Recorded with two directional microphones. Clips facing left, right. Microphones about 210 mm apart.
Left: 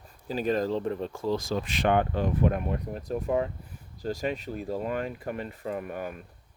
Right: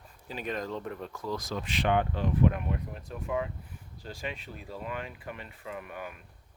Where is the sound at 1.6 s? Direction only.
45° left (ahead or behind).